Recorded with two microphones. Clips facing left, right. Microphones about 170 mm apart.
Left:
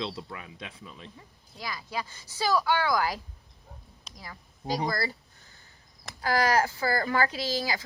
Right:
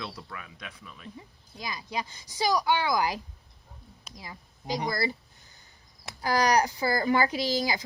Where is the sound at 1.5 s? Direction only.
20° right (ahead or behind).